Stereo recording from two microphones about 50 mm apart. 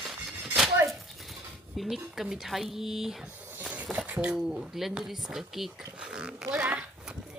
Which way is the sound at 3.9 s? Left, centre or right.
Right.